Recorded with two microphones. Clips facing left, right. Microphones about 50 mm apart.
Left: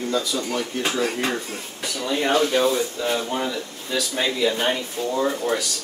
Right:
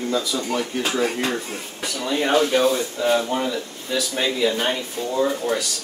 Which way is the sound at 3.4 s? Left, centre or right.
Centre.